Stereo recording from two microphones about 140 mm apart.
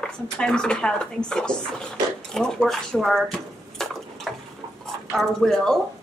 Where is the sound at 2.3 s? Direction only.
5° left (ahead or behind).